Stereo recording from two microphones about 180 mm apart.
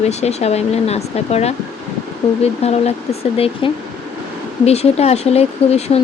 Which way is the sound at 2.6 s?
35° left (ahead or behind).